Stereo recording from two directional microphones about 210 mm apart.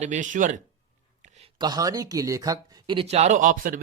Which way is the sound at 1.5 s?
20° right (ahead or behind).